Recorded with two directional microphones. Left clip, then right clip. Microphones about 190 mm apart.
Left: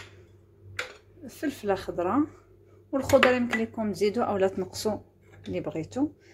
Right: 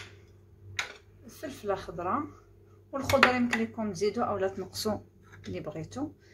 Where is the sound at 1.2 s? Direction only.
30° left (ahead or behind).